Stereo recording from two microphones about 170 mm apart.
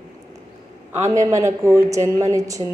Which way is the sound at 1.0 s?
20° right (ahead or behind).